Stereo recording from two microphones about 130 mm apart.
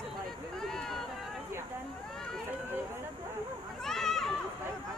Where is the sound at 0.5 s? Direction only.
5° left (ahead or behind).